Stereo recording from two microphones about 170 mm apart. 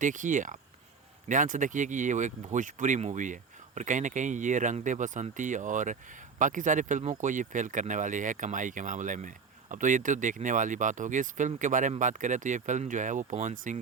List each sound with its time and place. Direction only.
0.0 s speech: 50° right (ahead or behind)